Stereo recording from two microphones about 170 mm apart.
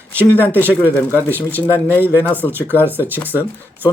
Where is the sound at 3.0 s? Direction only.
10° right (ahead or behind).